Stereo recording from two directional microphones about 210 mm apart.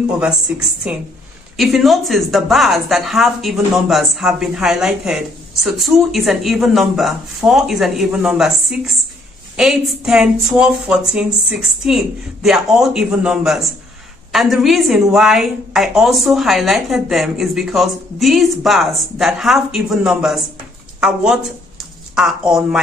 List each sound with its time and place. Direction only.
0.2 s a woman's voice: 5° right (ahead or behind)